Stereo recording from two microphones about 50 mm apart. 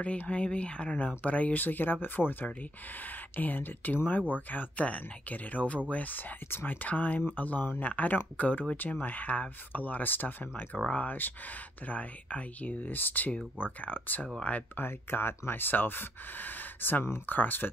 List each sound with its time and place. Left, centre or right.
0.3 s speech: left
6.9 s speech: left
14.8 s speech: left